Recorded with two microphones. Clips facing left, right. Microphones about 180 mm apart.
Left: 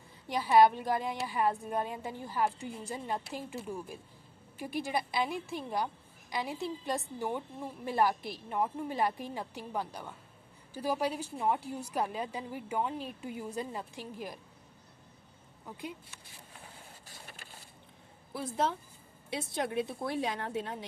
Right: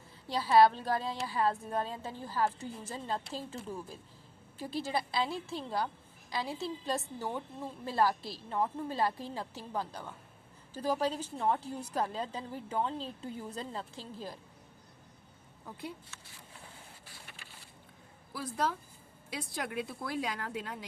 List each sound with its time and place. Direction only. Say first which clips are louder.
0.3 s a woman's voice: even; 15° left (ahead or behind)
15.6 s a woman's voice: left 1 dB; 15° left (ahead or behind)
17.1 s printer: left 2 dB; 45° left (ahead or behind)
18.3 s a woman's voice: left 2 dB; 25° left (ahead or behind)